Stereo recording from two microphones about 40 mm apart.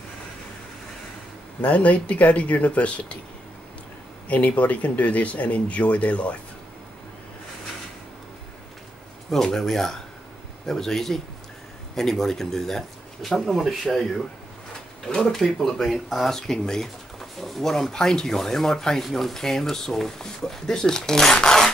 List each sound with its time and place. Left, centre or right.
1.6 s speech: left
4.3 s speech: left
9.3 s speech: centre
13.3 s speech: centre
15.6 s speech: centre
16.3 s speech: centre
17.2 s pigeon: centre
17.9 s speech: centre
19.0 s speech: centre